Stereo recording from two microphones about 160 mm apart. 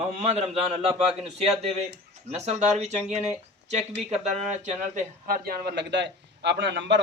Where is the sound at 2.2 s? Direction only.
40° right (ahead or behind).